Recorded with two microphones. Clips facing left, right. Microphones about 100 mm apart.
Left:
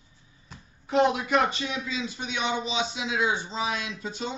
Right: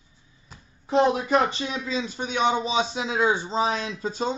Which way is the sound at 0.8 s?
30° right (ahead or behind).